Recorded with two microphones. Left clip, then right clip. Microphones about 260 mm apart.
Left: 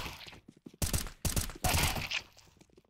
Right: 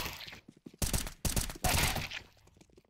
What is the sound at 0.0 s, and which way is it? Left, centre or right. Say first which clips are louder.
Fusillade: right 2 dB; centre.